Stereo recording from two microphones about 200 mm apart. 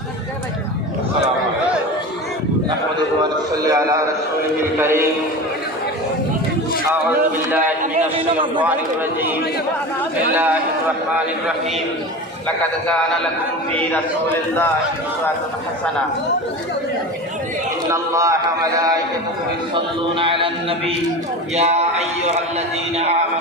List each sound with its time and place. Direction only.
3.7 s a man's voice: 15° right (ahead or behind)
6.9 s a man's voice: 10° right (ahead or behind)
7.8 s a man's voice: 40° right (ahead or behind)
17.9 s a man's voice: 15° right (ahead or behind); by 22.0 s 35° right (ahead or behind)